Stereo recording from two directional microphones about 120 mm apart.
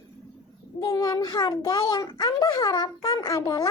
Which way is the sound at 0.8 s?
35° left (ahead or behind).